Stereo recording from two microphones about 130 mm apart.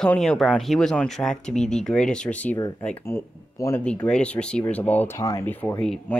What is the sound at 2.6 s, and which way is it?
Speech, 30° left (ahead or behind).